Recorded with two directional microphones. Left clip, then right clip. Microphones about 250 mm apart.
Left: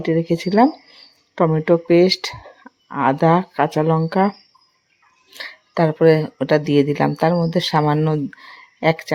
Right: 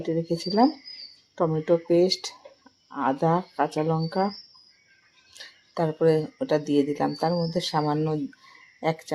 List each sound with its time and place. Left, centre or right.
0.0 s speech: left